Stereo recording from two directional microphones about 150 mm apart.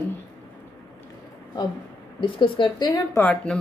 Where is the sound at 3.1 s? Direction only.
10° left (ahead or behind).